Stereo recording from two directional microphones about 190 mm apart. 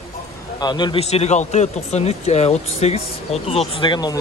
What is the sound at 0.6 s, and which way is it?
A man's voice, 25° left (ahead or behind).